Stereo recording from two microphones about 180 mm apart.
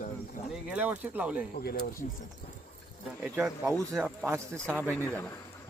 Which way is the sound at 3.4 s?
10° right (ahead or behind).